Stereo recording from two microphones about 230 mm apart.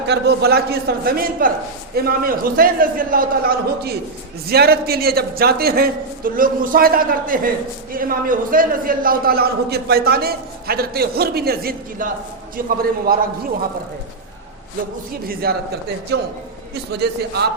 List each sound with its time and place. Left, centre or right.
0.1 s a man's voice: right
15.3 s a man's voice: right
16.9 s a man's voice: right